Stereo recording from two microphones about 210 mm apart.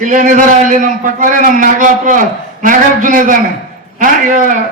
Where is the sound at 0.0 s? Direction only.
40° right (ahead or behind).